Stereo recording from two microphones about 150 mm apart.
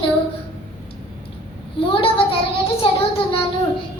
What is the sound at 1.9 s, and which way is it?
Speech, 40° left (ahead or behind).